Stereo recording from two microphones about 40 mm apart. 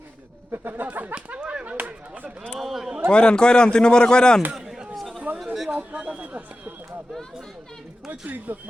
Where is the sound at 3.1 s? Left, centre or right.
Left.